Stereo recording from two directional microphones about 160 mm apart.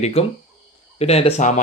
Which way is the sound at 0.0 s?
40° left (ahead or behind).